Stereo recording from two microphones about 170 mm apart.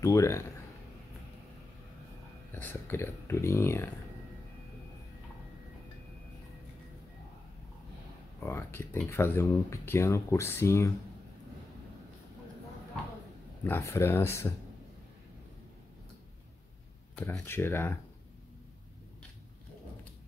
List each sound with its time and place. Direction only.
0.0 s speech: 20° left (ahead or behind)
2.5 s speech: 10° left (ahead or behind)
8.4 s speech: 15° left (ahead or behind)
13.7 s speech: 15° left (ahead or behind)
17.1 s speech: 15° left (ahead or behind)